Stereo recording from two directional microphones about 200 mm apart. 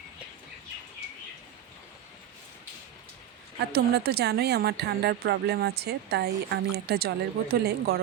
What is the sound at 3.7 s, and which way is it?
Speech, 55° right (ahead or behind).